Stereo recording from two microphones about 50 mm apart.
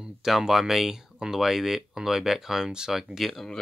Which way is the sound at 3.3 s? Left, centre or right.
Centre.